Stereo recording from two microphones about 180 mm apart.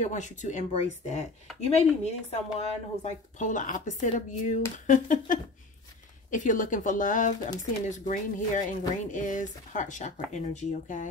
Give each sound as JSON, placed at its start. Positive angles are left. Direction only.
{"t": 0.0, "sound": "a woman's voice", "side_deg": 40}